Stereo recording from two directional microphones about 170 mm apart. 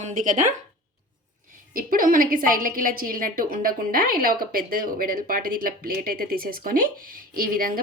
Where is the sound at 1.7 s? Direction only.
55° right (ahead or behind).